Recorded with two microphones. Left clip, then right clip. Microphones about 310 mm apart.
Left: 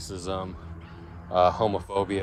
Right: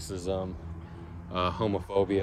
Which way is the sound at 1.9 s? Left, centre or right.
Centre.